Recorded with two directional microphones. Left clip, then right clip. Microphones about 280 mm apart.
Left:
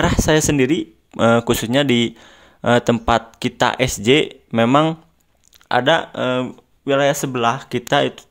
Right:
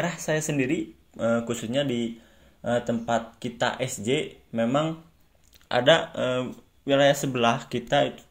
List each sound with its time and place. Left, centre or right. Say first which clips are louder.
0.0 s speech: left 11 dB; left
5.7 s speech: left 4 dB; left